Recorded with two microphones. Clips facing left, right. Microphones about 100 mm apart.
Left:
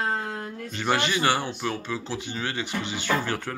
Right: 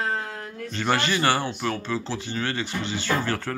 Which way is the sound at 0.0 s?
25° left (ahead or behind).